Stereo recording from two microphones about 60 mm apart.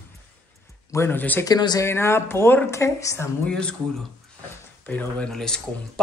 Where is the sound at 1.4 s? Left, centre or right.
Left.